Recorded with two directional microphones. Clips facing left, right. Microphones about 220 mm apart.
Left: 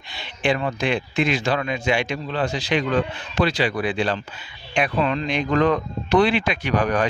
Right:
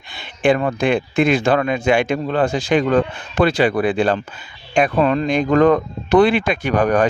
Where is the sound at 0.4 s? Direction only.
50° right (ahead or behind).